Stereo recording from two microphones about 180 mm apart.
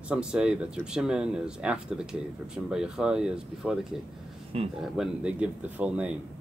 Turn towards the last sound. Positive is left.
turn(degrees=-5)  # may be behind; listen again after turning